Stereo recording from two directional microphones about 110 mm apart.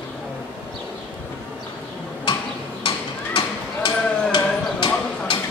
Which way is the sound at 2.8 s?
50° left (ahead or behind).